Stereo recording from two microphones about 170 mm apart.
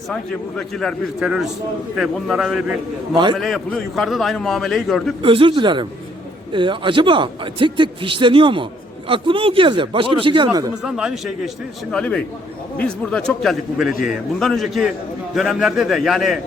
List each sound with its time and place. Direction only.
0.1 s a man's voice: 5° left (ahead or behind)
5.2 s a man's voice: 30° right (ahead or behind)
10.8 s a man's voice: 5° right (ahead or behind)